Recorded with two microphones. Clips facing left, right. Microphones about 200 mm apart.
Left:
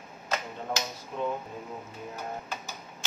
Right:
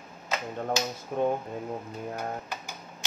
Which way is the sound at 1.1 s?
55° right (ahead or behind).